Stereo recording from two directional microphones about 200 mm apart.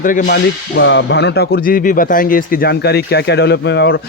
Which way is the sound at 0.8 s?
65° left (ahead or behind).